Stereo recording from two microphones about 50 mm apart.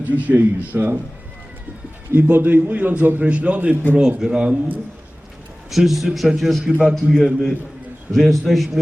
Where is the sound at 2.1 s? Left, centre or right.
Right.